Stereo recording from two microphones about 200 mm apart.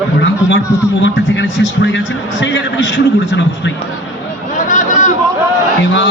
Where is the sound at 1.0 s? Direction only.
65° left (ahead or behind).